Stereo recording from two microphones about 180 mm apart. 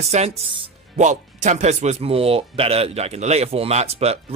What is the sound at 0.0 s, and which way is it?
Speech, 35° right (ahead or behind).